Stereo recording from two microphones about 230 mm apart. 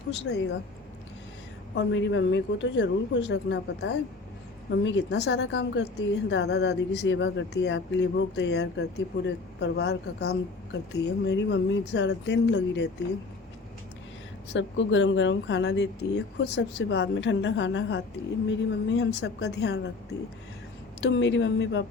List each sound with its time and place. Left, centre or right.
0.1 s speech: left
1.7 s speech: left
14.5 s speech: left
21.0 s speech: left